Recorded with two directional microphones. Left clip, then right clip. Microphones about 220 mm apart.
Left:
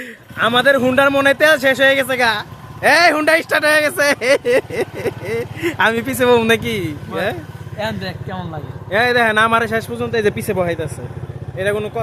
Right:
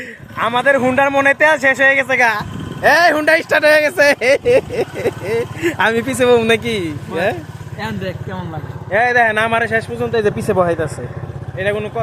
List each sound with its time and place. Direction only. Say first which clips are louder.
0.3 s a man's voice: left 1 dB; 20° left (ahead or behind)
3.5 s speech: right 3 dB; 5° right (ahead or behind)
5.0 s speech: right 3 dB; centre (ahead or behind)
7.8 s a man's voice: left 1 dB; 15° left (ahead or behind)
11.5 s speech: even; 20° left (ahead or behind)